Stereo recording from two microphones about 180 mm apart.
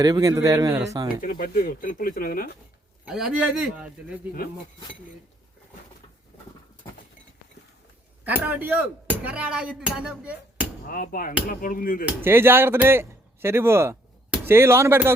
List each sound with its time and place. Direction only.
0.0 s speech: 20° right (ahead or behind)
1.2 s speech: 50° left (ahead or behind)
3.1 s speech: 5° right (ahead or behind)
8.2 s speech: 10° right (ahead or behind)
10.8 s speech: 50° left (ahead or behind)
12.0 s speech: 10° right (ahead or behind)